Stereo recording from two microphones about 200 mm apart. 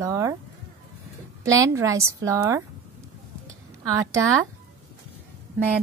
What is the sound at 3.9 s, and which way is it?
Speech, 15° right (ahead or behind).